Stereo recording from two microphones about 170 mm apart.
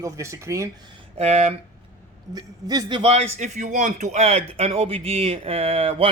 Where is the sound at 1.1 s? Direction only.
40° right (ahead or behind).